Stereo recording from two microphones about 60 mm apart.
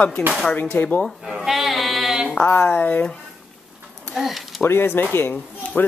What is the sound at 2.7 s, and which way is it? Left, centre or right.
Speech, left.